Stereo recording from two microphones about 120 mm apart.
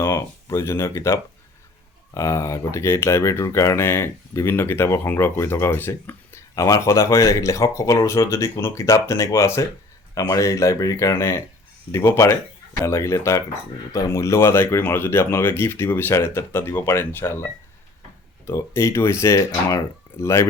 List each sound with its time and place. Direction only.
0.0 s speech: 25° left (ahead or behind)